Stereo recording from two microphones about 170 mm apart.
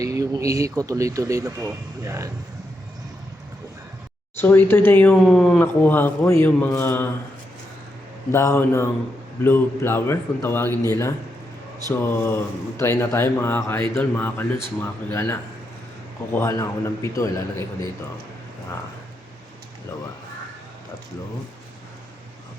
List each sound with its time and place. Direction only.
0.0 s speech: 20° right (ahead or behind)
4.4 s speech: 10° left (ahead or behind)
8.3 s speech: 15° left (ahead or behind)